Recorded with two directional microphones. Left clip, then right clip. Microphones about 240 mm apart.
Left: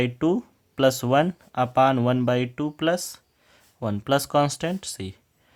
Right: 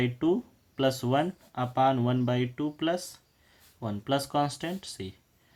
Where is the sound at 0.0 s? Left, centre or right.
Left.